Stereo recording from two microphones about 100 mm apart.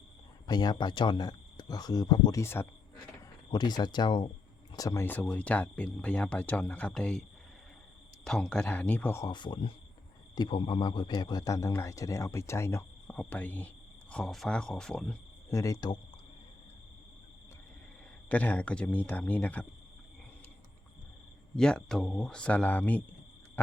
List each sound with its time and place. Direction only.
0.4 s speech: 45° left (ahead or behind)
2.4 s speech: 25° left (ahead or behind)
3.5 s speech: 45° left (ahead or behind)
4.7 s speech: 35° left (ahead or behind)
5.0 s speech: 15° left (ahead or behind)
9.2 s speech: 50° left (ahead or behind); by 12.8 s 25° left (ahead or behind)
13.1 s speech: 15° left (ahead or behind)
14.1 s speech: 5° left (ahead or behind)
15.4 s speech: 35° left (ahead or behind)
18.3 s speech: 15° left (ahead or behind)
21.5 s speech: 5° left (ahead or behind)